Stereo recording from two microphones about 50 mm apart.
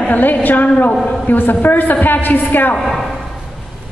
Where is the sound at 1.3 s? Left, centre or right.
Left.